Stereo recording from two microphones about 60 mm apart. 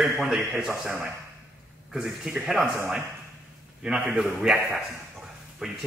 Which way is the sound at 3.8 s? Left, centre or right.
Centre.